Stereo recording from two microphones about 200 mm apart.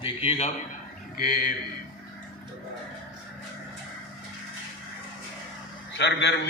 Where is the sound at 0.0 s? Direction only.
30° left (ahead or behind).